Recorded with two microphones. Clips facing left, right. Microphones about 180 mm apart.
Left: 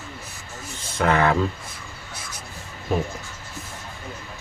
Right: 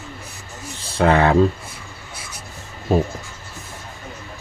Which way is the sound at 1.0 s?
30° right (ahead or behind).